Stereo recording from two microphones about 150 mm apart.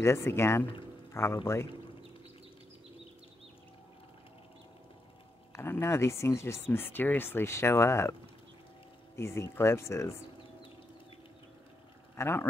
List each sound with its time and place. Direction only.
0.0 s speech: 15° left (ahead or behind)
5.5 s speech: 15° left (ahead or behind)
12.2 s speech: 15° left (ahead or behind)